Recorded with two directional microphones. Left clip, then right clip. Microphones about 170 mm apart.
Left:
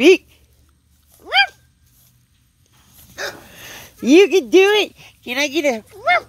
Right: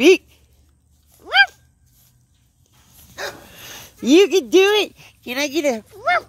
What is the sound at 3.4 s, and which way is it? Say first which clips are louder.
Speech: left 1 dB; centre (ahead or behind).